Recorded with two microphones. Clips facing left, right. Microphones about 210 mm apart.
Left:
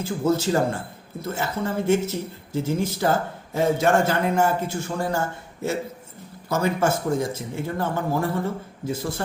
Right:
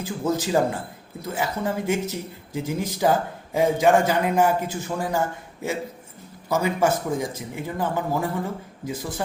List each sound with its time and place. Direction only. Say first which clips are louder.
0.0 s speech: left 3 dB; 15° right (ahead or behind)
6.5 s speech: right 1 dB; 15° right (ahead or behind)